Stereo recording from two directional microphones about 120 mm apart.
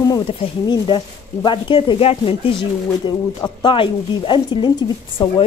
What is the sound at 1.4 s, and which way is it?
Speech, 45° left (ahead or behind).